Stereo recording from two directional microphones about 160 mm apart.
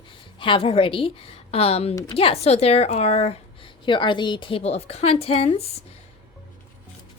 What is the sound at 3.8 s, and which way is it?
A woman's voice, 30° left (ahead or behind).